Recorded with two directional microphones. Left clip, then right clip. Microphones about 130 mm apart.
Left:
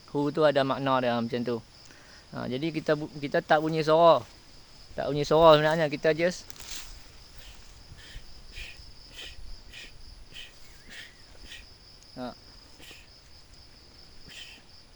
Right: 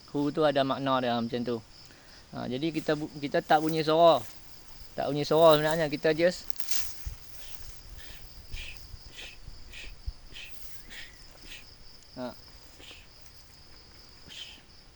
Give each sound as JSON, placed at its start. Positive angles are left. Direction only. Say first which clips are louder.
{"t": 0.1, "sound": "speech", "louder": "left 2 dB", "side_deg": 35}
{"t": 4.9, "sound": "speech", "louder": "left 1 dB", "side_deg": 20}
{"t": 5.3, "sound": "speech", "louder": "left 2 dB", "side_deg": 45}
{"t": 5.8, "sound": "speech", "louder": "even", "side_deg": 15}
{"t": 6.5, "sound": "a sound", "louder": "right 4 dB", "side_deg": -90}
{"t": 8.6, "sound": "insect", "louder": "even", "side_deg": 20}
{"t": 9.2, "sound": "cricket", "louder": "left 1 dB", "side_deg": 25}
{"t": 10.3, "sound": "a sound", "louder": "even", "side_deg": 20}
{"t": 12.1, "sound": "cricket", "louder": "even", "side_deg": 20}
{"t": 14.3, "sound": "cricket", "louder": "right 1 dB", "side_deg": 25}